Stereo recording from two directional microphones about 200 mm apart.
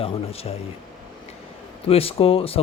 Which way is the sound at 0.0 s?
30° left (ahead or behind).